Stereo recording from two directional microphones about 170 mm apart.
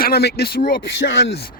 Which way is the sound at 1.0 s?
90° left.